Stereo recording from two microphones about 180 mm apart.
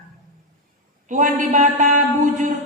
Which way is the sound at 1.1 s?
45° right (ahead or behind).